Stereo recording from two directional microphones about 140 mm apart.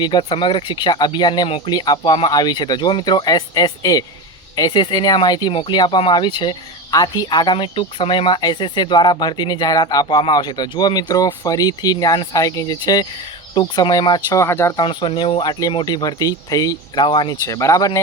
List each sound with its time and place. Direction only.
0.0 s speech: 35° left (ahead or behind)
14.3 s speech: 20° left (ahead or behind)
14.8 s speech: 35° left (ahead or behind)
17.4 s speech: 20° left (ahead or behind)